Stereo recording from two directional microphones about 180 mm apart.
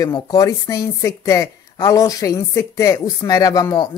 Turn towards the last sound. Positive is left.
turn(degrees=25)  # may be behind; listen again after turning